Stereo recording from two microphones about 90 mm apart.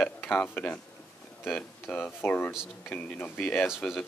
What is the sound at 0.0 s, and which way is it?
Speech, 10° left (ahead or behind).